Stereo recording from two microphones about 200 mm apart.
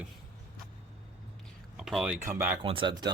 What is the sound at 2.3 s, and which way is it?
Speech, 10° right (ahead or behind).